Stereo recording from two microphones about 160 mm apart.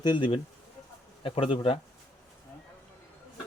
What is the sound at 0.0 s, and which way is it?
Speech, 30° left (ahead or behind).